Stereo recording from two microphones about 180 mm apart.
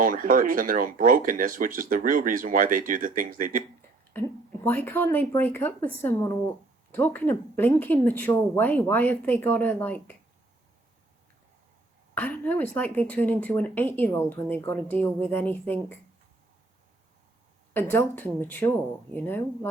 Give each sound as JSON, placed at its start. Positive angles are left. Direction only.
{"t": 0.0, "sound": "speech", "side_deg": -50}
{"t": 4.6, "sound": "a woman's voice", "side_deg": 10}
{"t": 12.1, "sound": "a woman's voice", "side_deg": 10}
{"t": 17.7, "sound": "a woman's voice", "side_deg": 10}